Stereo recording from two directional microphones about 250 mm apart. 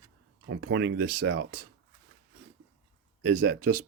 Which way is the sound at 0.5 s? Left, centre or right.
Right.